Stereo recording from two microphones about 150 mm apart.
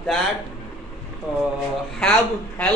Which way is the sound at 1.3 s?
5° right (ahead or behind).